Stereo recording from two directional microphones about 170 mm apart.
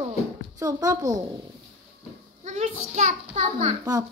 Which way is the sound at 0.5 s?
20° right (ahead or behind).